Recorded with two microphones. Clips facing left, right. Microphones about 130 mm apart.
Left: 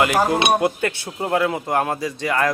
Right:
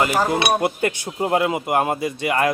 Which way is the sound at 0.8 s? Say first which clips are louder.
Right 2 dB; 15° right (ahead or behind).